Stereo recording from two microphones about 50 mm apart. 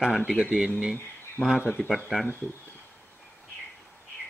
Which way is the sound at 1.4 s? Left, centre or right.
Left.